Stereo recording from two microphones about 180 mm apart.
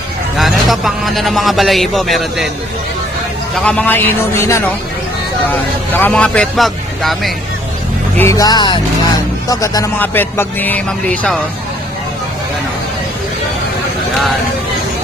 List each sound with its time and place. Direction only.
0.3 s a man's voice: centre (ahead or behind)
3.5 s speech: 5° left (ahead or behind)
5.9 s a man's voice: 10° left (ahead or behind)
8.2 s speech: 20° left (ahead or behind)